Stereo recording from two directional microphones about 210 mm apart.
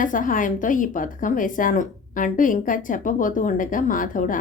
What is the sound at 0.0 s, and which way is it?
Speech, 40° left (ahead or behind).